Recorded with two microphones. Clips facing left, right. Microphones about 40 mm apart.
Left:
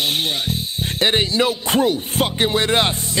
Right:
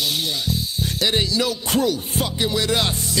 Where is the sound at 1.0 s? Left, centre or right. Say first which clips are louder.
Left 4 dB; left.